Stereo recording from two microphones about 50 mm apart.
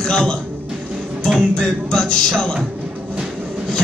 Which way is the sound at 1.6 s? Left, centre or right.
Centre.